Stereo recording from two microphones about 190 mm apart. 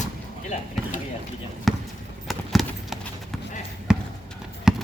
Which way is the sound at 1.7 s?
Centre (ahead or behind).